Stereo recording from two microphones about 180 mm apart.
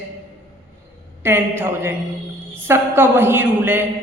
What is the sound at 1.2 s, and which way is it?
A man's voice, 10° right (ahead or behind).